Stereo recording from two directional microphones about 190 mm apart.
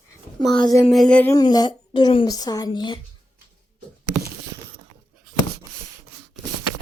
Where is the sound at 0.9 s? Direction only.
5° left (ahead or behind); by 3.0 s 25° left (ahead or behind).